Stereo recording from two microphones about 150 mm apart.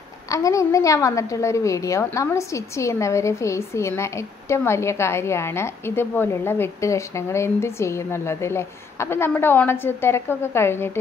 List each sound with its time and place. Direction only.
0.3 s a woman's voice: 20° left (ahead or behind)